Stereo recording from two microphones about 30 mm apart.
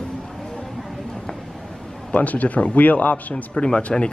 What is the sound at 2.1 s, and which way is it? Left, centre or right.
A man's voice, left.